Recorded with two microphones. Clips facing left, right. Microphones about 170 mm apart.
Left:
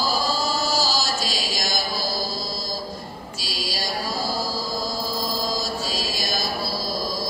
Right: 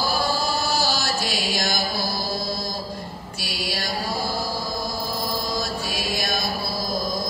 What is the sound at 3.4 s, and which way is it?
Mantra, 60° right (ahead or behind).